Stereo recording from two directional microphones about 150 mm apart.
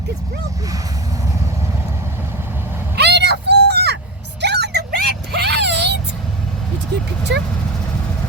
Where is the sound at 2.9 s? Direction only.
90° right.